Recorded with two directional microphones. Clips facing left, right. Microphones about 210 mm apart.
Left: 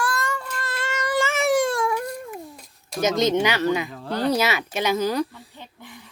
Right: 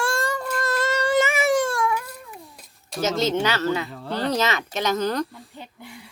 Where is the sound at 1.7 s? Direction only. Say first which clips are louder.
Left 1 dB; 30° left (ahead or behind).